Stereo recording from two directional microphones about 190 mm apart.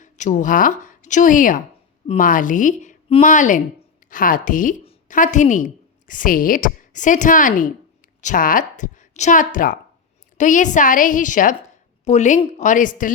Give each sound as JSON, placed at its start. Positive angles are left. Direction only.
{"t": 0.0, "sound": "a woman's voice", "side_deg": 40}
{"t": 4.8, "sound": "a sound", "side_deg": 30}
{"t": 5.1, "sound": "a woman's voice", "side_deg": 40}